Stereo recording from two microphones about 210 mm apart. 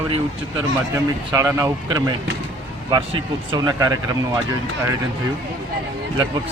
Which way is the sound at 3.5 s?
20° right (ahead or behind).